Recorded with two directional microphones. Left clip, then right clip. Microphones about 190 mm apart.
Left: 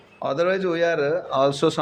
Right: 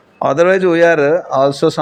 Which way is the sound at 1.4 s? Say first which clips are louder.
Right 4 dB; 25° right (ahead or behind).